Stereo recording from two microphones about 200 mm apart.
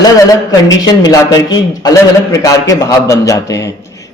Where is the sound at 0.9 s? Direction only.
20° left (ahead or behind).